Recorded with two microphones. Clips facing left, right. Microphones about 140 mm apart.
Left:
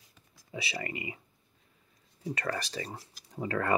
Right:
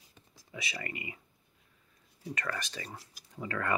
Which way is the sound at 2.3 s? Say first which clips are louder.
Left 4 dB; 30° left (ahead or behind).